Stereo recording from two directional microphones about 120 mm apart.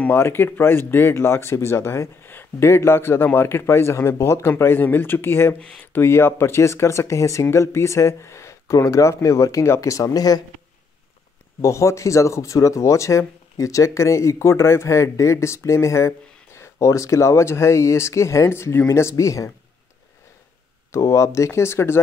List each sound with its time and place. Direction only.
0.0 s speech: 20° left (ahead or behind)
11.6 s speech: 25° left (ahead or behind)
20.9 s speech: 25° left (ahead or behind)